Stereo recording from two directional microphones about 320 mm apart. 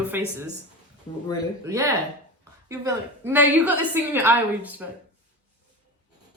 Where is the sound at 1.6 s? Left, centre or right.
Centre.